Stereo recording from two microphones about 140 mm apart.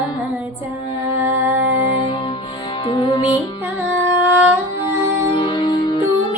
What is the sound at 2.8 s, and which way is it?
Music, 35° left (ahead or behind).